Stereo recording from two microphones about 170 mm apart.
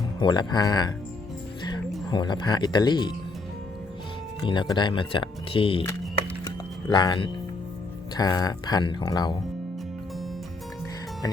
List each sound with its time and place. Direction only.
0.2 s speech: 25° left (ahead or behind)
2.0 s speech: 25° left (ahead or behind)
4.4 s speech: 25° left (ahead or behind)
6.4 s music: 25° left (ahead or behind)
8.1 s speech: 20° left (ahead or behind)